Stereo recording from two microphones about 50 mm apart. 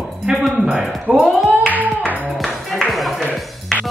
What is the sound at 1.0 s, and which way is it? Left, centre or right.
Speech, right.